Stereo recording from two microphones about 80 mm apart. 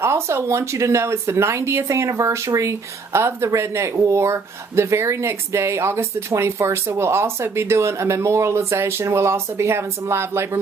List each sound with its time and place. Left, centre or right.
0.0 s speech: right